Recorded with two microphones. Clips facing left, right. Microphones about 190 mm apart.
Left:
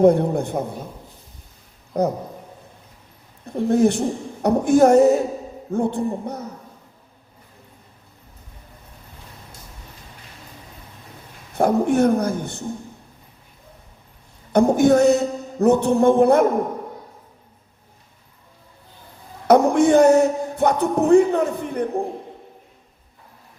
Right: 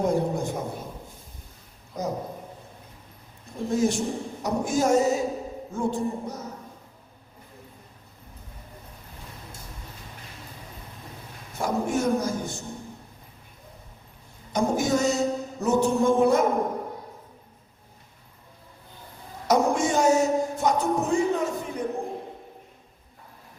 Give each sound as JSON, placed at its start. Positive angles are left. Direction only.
{"t": 0.0, "sound": "music", "side_deg": 60}
{"t": 1.9, "sound": "music", "side_deg": 60}
{"t": 3.4, "sound": "music", "side_deg": 60}
{"t": 11.5, "sound": "music", "side_deg": 60}
{"t": 14.5, "sound": "music", "side_deg": 60}
{"t": 19.5, "sound": "music", "side_deg": 60}